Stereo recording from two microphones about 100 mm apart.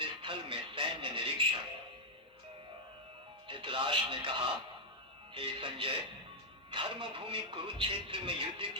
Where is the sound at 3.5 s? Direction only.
60° right (ahead or behind).